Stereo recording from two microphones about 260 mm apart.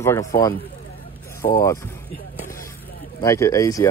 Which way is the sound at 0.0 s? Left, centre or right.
Centre.